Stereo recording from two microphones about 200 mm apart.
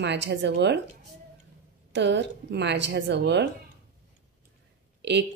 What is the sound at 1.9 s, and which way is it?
A woman's voice, 60° right (ahead or behind).